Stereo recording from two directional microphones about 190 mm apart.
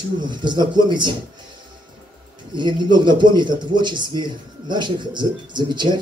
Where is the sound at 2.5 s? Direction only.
25° right (ahead or behind).